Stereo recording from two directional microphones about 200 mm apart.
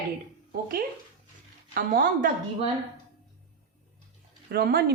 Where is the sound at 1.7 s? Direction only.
45° right (ahead or behind).